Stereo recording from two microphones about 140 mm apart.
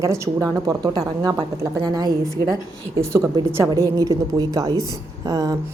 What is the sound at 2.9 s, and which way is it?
A woman's voice, 20° right (ahead or behind).